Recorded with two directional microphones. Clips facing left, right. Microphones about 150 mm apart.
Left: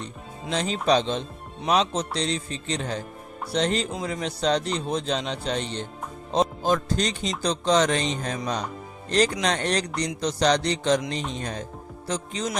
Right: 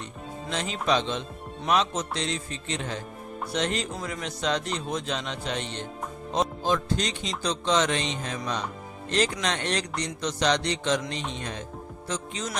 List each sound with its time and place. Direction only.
0.5 s speech: 35° left (ahead or behind)